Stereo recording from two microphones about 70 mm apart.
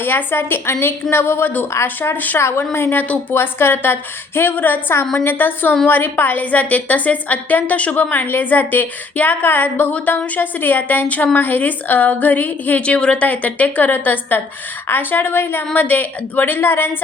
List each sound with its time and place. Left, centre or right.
0.0 s a woman's voice: left